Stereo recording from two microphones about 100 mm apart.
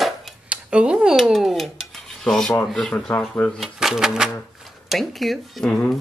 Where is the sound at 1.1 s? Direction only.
Centre (ahead or behind).